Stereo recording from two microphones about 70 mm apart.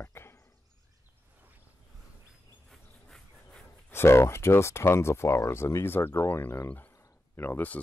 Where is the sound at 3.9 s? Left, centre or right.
Left.